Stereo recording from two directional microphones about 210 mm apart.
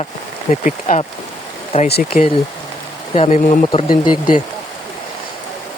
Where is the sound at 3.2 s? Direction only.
35° left (ahead or behind).